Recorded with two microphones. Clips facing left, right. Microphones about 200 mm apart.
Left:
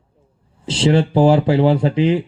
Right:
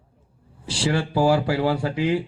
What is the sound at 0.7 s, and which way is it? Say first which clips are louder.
Speech: left 8 dB; 20° left (ahead or behind).